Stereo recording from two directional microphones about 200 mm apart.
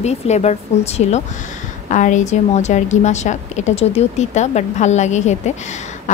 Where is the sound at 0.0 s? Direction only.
35° left (ahead or behind).